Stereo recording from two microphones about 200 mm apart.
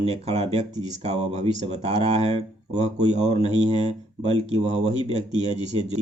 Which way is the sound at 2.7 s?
35° right (ahead or behind).